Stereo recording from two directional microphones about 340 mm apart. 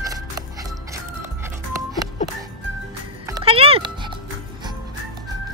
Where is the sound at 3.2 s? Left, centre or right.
Centre.